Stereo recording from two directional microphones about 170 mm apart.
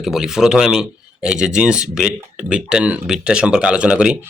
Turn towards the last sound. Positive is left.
turn(degrees=-5)  # may be behind; listen again after turning